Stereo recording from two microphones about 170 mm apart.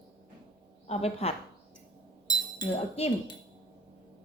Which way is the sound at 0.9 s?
35° left (ahead or behind).